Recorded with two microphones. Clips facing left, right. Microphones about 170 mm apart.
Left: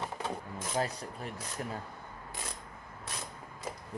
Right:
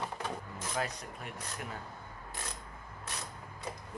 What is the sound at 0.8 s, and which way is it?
Speech, 30° left (ahead or behind).